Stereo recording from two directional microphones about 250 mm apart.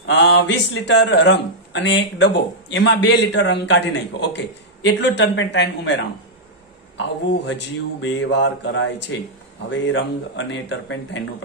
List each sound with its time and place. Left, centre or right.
0.0 s speech: left
7.0 s speech: left